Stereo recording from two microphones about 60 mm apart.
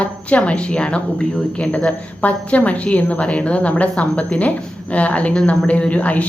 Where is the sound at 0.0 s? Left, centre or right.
Left.